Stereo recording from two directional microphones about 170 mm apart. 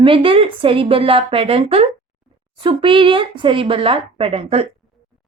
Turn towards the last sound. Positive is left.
turn(degrees=-35)  # may be behind; listen again after turning